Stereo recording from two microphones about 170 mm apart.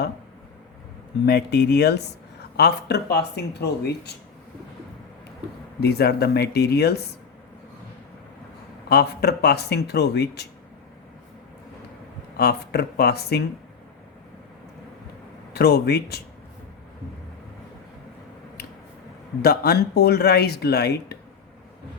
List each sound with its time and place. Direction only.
1.2 s speech: 75° left (ahead or behind)
5.8 s speech: 70° left (ahead or behind)
8.9 s speech: 70° left (ahead or behind)
12.4 s speech: 65° left (ahead or behind)
15.5 s speech: 70° left (ahead or behind)
19.4 s speech: 65° left (ahead or behind)